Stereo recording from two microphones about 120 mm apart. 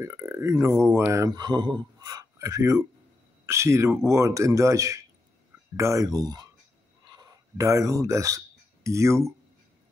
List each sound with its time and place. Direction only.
0.0 s speech: 25° right (ahead or behind)